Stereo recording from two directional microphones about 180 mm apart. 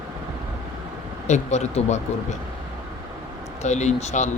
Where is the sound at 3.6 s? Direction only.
40° left (ahead or behind).